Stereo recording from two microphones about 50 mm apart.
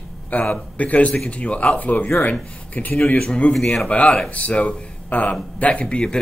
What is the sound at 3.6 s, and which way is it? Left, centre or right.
A man's voice, centre.